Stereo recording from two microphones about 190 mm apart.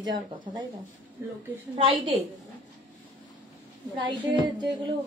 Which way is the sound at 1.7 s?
25° right (ahead or behind).